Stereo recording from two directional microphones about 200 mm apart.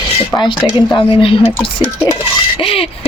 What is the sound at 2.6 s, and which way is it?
Speech, 25° left (ahead or behind).